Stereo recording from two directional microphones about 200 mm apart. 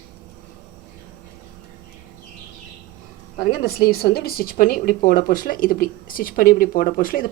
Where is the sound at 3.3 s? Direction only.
50° left (ahead or behind).